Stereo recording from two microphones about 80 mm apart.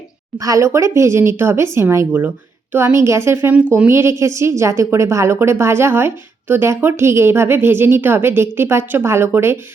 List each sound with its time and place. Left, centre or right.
0.3 s a woman's voice: right